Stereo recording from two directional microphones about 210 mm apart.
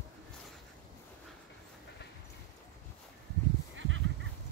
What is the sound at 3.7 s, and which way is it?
Fowl, 65° right (ahead or behind).